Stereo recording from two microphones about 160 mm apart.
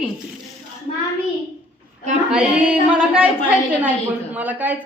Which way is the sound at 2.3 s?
5° right (ahead or behind).